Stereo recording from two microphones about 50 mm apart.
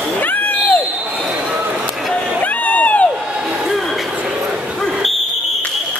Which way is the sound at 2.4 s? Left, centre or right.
Left.